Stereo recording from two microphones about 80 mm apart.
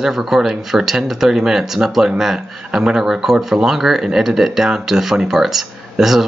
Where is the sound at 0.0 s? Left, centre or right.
Centre.